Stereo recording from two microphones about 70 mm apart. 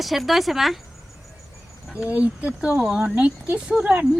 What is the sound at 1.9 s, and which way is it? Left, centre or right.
Speech, centre.